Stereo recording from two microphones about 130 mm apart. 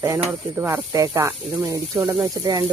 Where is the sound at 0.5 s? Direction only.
20° right (ahead or behind).